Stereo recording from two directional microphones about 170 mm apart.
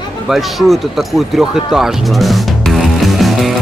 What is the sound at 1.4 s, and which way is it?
Music, centre (ahead or behind).